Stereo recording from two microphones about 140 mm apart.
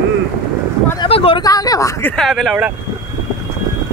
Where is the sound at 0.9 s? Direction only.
40° left (ahead or behind).